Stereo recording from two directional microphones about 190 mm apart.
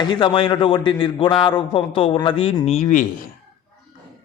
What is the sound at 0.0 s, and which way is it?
A man's voice, 25° left (ahead or behind).